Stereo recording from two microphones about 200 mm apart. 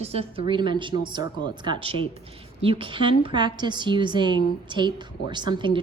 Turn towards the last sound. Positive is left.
turn(degrees=-25)  # may be behind; listen again after turning